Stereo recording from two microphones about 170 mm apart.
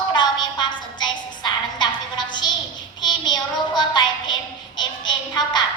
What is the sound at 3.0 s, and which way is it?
Child singing, 25° left (ahead or behind).